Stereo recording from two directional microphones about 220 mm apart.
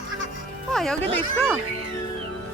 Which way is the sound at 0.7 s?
Centre (ahead or behind).